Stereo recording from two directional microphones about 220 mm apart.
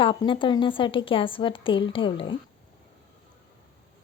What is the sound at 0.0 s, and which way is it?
A woman's voice, 20° left (ahead or behind).